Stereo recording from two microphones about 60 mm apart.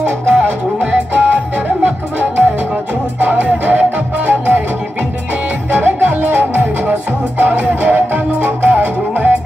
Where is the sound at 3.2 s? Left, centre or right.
Right.